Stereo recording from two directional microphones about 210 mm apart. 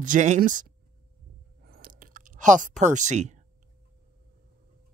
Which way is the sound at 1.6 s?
45° right (ahead or behind).